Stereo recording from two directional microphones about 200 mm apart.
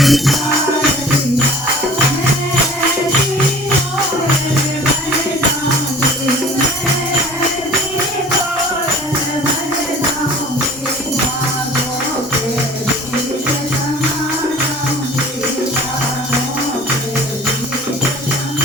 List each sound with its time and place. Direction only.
0.0 s music: centre (ahead or behind)